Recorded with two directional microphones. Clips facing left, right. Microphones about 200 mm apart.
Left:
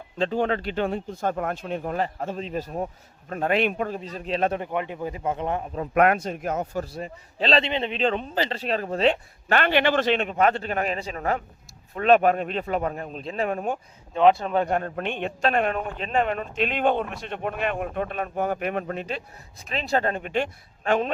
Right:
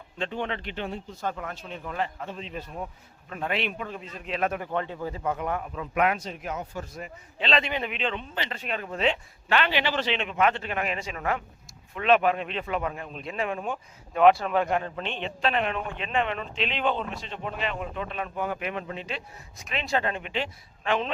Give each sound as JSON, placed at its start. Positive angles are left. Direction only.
{"t": 0.2, "sound": "speech", "side_deg": 40}
{"t": 0.9, "sound": "a man's voice", "side_deg": 55}
{"t": 4.7, "sound": "speech", "side_deg": 15}
{"t": 5.7, "sound": "a man's voice", "side_deg": 45}
{"t": 14.1, "sound": "a man's voice", "side_deg": 25}